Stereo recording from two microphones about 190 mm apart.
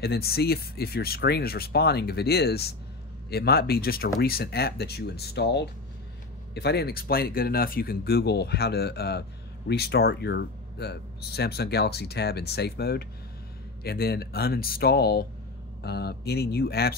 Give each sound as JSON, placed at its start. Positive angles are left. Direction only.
{"t": 0.0, "sound": "speech", "side_deg": 55}